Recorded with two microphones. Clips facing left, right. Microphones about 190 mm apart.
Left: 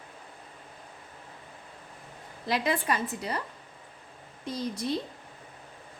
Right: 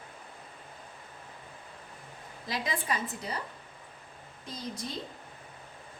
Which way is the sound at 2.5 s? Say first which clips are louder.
Left 6 dB; 65° left (ahead or behind).